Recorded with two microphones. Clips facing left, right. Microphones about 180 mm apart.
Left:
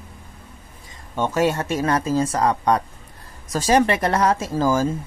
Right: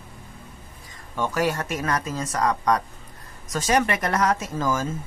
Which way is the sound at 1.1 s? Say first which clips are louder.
Left 4 dB; 25° left (ahead or behind).